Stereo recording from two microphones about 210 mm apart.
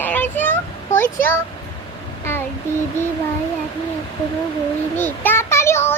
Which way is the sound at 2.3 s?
10° left (ahead or behind).